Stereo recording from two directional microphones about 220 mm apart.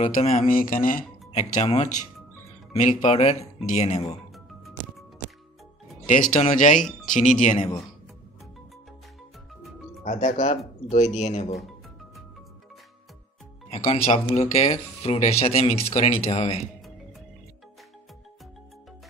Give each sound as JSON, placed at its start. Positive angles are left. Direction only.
{"t": 0.4, "sound": "speech", "side_deg": 40}
{"t": 6.0, "sound": "speech", "side_deg": 35}
{"t": 6.8, "sound": "speech", "side_deg": 0}
{"t": 7.2, "sound": "speech", "side_deg": 35}
{"t": 10.0, "sound": "speech", "side_deg": 35}
{"t": 13.7, "sound": "speech", "side_deg": 25}